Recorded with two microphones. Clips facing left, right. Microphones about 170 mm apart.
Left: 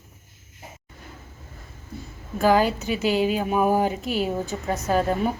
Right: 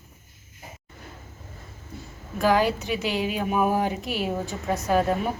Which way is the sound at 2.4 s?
Centre (ahead or behind).